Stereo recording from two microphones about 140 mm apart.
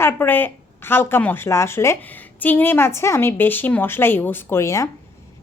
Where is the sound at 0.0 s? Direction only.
15° left (ahead or behind).